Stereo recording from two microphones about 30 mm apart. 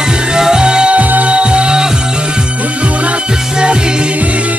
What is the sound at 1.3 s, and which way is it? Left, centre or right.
Music, right.